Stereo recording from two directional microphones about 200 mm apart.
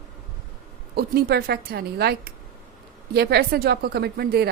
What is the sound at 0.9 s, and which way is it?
A woman's voice, 50° right (ahead or behind).